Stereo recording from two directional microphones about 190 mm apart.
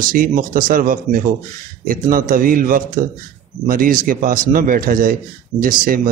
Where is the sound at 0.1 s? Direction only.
45° right (ahead or behind).